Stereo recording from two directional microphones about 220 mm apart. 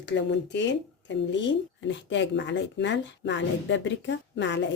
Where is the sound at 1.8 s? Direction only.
55° left (ahead or behind).